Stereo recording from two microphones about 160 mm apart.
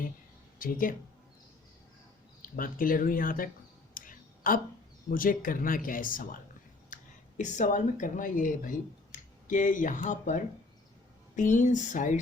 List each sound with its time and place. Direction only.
0.6 s speech: 60° left (ahead or behind)
2.4 s speech: 60° left (ahead or behind)
3.9 s a sound: 60° left (ahead or behind)
5.1 s speech: 60° left (ahead or behind)